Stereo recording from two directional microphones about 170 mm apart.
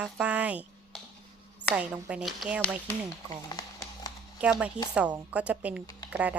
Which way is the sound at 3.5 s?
25° left (ahead or behind).